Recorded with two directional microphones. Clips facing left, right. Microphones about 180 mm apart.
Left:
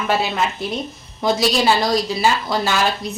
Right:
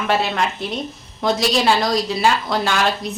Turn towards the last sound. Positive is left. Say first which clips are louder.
# even
turn(degrees=0)  # may be behind; listen again after turning